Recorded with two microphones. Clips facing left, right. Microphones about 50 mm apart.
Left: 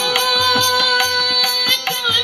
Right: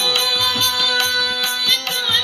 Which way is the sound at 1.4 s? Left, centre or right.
Left.